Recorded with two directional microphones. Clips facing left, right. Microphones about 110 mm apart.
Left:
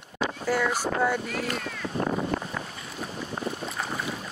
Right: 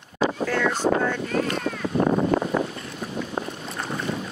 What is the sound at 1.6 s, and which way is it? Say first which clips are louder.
Boat: right 7 dB; 50° right (ahead or behind).